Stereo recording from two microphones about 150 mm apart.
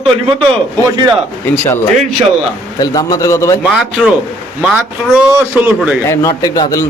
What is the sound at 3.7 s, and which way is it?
A man's voice, centre (ahead or behind).